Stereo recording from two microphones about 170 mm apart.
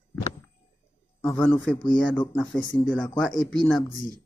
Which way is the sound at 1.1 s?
5° left (ahead or behind).